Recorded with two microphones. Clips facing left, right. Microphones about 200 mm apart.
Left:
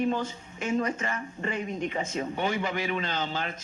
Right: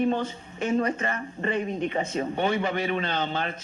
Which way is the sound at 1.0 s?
55° right (ahead or behind).